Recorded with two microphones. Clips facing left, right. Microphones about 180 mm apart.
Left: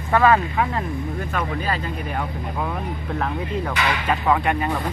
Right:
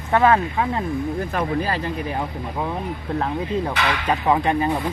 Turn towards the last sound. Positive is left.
turn(degrees=-25)  # may be behind; listen again after turning